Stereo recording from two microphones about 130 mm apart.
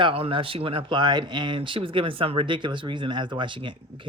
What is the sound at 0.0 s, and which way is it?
Speech, 45° right (ahead or behind).